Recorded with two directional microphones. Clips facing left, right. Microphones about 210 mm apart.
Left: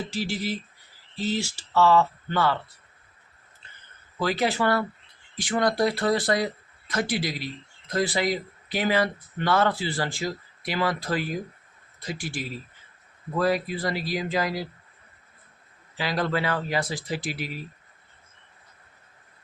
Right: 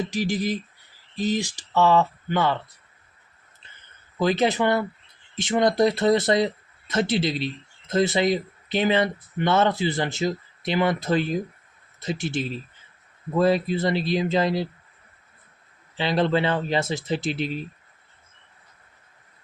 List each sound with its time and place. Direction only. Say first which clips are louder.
0.1 s speech: right 4 dB; 15° right (ahead or behind)
4.2 s speech: right 4 dB; 20° right (ahead or behind)
16.0 s speech: right 5 dB; 25° right (ahead or behind)